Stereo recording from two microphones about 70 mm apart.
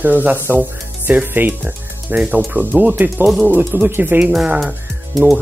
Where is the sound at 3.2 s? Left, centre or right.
Centre.